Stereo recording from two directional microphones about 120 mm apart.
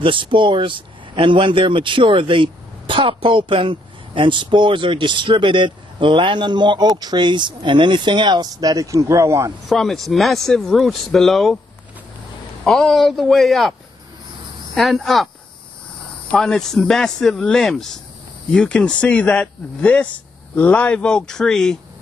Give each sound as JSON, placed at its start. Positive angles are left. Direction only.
{"t": 0.0, "sound": "speech", "side_deg": -45}
{"t": 9.7, "sound": "speech", "side_deg": 0}
{"t": 12.6, "sound": "speech", "side_deg": 0}
{"t": 14.8, "sound": "speech", "side_deg": 0}
{"t": 16.3, "sound": "speech", "side_deg": 5}